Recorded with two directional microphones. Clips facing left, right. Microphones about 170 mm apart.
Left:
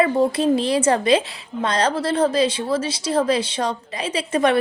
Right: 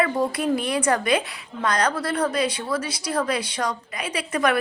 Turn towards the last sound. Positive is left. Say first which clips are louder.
# left 4 dB
turn(degrees=25)  # may be behind; listen again after turning